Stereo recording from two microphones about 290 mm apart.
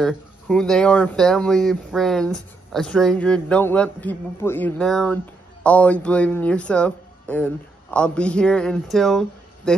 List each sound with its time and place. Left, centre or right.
0.0 s a man's voice: centre